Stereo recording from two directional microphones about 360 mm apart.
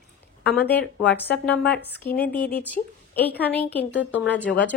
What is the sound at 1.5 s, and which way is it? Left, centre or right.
Speech, left.